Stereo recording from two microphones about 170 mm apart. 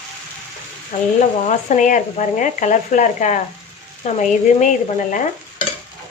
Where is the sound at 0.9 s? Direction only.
40° left (ahead or behind).